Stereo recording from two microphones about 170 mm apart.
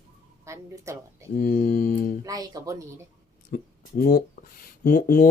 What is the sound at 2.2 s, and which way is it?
Speech, 20° right (ahead or behind).